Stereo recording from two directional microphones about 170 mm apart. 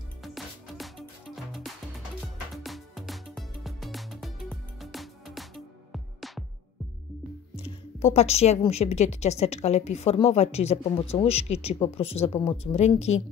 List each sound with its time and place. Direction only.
0.2 s music: centre (ahead or behind)
7.5 s a woman's voice: 35° left (ahead or behind)